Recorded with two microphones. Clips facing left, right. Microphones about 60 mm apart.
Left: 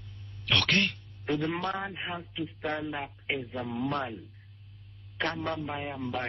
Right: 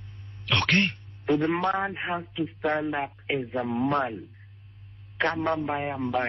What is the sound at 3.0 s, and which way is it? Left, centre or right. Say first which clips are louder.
Speech: right 5 dB; centre.